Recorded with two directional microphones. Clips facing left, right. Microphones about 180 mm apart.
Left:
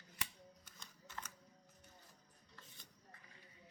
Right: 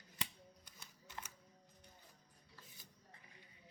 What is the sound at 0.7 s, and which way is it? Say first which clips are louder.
Music: even; 10° right (ahead or behind).